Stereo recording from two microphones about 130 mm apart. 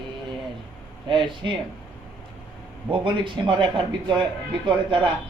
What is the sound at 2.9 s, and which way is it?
A man's voice, 40° right (ahead or behind).